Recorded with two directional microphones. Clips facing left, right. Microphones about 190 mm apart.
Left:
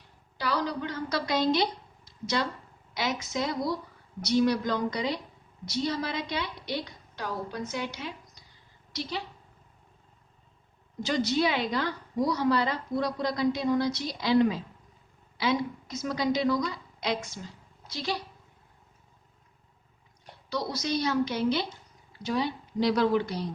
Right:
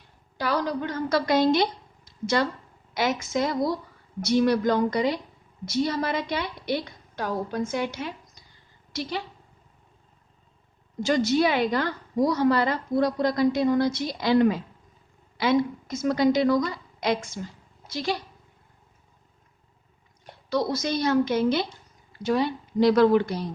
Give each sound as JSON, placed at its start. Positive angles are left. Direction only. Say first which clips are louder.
{"t": 0.3, "sound": "a woman's voice", "louder": "right 4 dB", "side_deg": -50}
{"t": 11.0, "sound": "a woman's voice", "louder": "right 5 dB", "side_deg": -50}
{"t": 20.5, "sound": "a woman's voice", "louder": "right 5 dB", "side_deg": -50}